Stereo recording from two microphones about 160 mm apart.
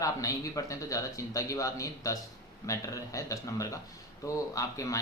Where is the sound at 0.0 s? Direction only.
20° left (ahead or behind).